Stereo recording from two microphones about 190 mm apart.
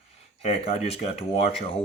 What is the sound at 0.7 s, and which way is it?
Speech, 30° left (ahead or behind).